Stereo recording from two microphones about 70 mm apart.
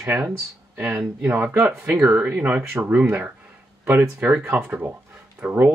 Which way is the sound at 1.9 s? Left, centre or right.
Centre.